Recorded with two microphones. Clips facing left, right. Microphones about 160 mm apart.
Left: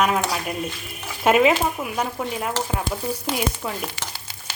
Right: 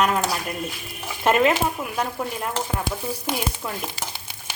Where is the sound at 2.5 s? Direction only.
20° right (ahead or behind).